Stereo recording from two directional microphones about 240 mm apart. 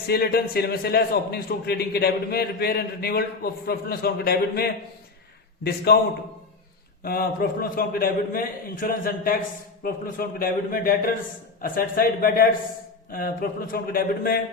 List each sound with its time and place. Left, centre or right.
0.1 s a man's voice: left
7.0 s a man's voice: left